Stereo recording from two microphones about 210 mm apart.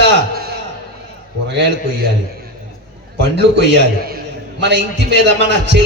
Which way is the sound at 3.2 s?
55° right (ahead or behind).